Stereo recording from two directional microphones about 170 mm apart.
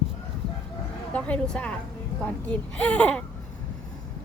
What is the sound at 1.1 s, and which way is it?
Speech, 5° left (ahead or behind).